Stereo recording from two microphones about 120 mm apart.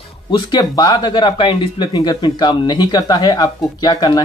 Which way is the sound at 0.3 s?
35° left (ahead or behind).